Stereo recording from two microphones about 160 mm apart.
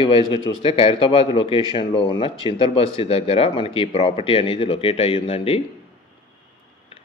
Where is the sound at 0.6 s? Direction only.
35° left (ahead or behind).